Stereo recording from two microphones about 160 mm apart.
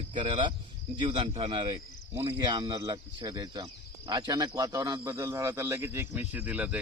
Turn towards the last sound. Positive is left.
turn(degrees=-10)  # may be behind; listen again after turning